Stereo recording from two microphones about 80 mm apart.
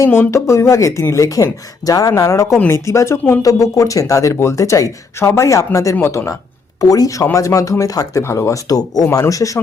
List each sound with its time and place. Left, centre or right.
0.0 s speech: left
6.8 s speech: left